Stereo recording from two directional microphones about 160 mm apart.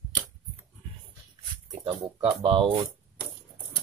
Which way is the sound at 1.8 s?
35° right (ahead or behind).